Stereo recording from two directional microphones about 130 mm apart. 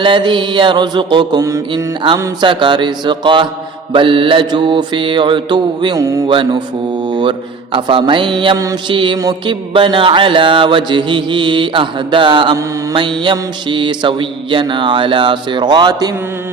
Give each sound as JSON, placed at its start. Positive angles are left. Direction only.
{"t": 0.0, "sound": "mantra", "side_deg": -40}
{"t": 2.4, "sound": "mantra", "side_deg": -35}
{"t": 6.2, "sound": "mantra", "side_deg": -40}
{"t": 8.5, "sound": "mantra", "side_deg": -25}
{"t": 8.9, "sound": "mantra", "side_deg": -40}